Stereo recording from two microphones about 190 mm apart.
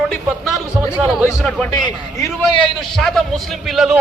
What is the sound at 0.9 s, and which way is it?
Speech, 5° right (ahead or behind).